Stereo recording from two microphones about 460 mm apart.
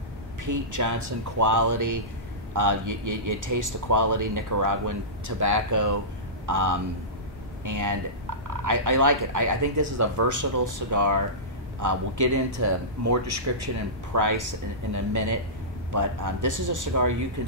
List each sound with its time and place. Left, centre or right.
0.4 s speech: right